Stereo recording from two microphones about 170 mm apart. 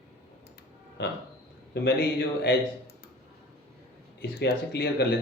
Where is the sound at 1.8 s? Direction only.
90° left.